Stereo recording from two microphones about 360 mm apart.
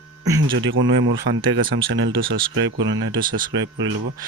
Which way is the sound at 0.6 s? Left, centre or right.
Right.